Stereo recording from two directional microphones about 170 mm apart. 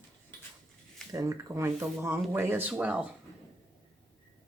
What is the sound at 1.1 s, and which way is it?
Speech, 20° right (ahead or behind).